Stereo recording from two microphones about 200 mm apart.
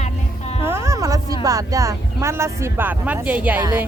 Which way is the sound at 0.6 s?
15° right (ahead or behind).